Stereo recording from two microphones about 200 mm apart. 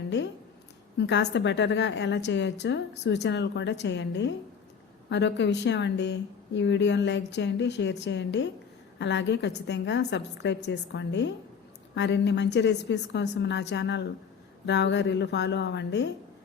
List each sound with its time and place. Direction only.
0.9 s speech: 60° left (ahead or behind)